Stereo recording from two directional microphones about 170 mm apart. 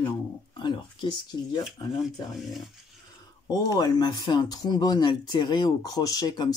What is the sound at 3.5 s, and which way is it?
Speech, 20° left (ahead or behind).